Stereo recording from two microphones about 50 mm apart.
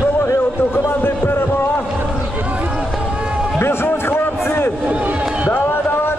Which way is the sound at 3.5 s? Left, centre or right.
Left.